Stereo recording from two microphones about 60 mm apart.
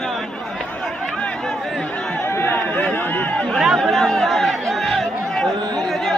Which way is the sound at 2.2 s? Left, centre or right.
Left.